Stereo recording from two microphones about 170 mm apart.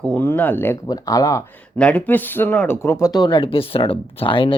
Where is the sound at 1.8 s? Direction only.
10° left (ahead or behind).